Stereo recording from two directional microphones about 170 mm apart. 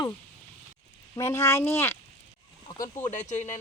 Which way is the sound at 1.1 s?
15° left (ahead or behind).